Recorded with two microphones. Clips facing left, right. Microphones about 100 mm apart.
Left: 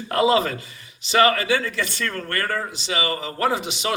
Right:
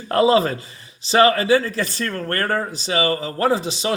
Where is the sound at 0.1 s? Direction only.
35° right (ahead or behind).